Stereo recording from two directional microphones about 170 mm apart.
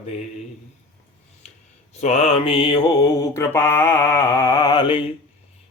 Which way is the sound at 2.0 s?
40° left (ahead or behind).